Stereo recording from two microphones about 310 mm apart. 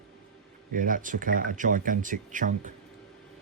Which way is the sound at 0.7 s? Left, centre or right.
Right.